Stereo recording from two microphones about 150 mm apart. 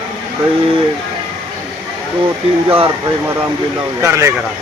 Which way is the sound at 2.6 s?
40° right (ahead or behind).